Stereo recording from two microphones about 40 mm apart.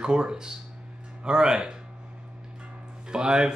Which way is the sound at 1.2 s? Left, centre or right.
Centre.